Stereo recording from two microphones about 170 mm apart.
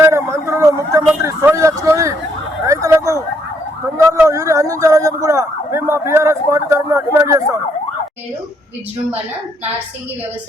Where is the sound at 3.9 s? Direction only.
20° right (ahead or behind).